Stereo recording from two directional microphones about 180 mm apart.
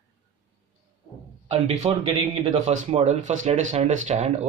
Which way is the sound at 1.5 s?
35° right (ahead or behind).